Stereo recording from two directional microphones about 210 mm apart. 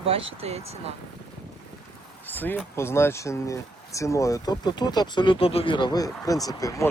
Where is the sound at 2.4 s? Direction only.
10° left (ahead or behind).